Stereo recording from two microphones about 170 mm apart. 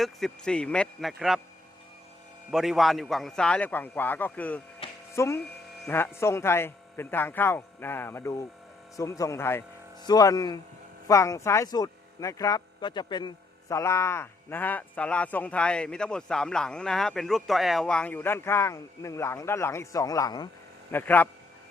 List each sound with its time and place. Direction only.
0.0 s a man's voice: 5° left (ahead or behind)
2.5 s a man's voice: centre (ahead or behind); by 20.5 s 20° left (ahead or behind)
20.9 s speech: 10° left (ahead or behind)